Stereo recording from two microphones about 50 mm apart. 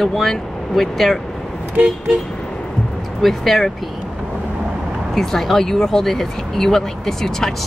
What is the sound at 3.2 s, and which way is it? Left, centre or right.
Speech, centre.